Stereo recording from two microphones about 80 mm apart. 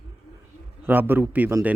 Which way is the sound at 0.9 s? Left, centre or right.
Right.